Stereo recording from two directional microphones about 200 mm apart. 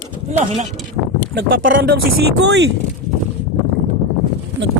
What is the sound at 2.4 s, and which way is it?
Speech, 60° right (ahead or behind).